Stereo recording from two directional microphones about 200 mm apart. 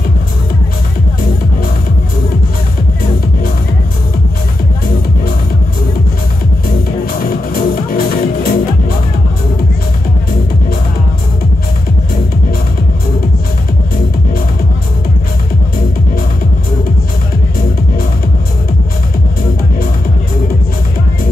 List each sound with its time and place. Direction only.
7.2 s music: 45° left (ahead or behind)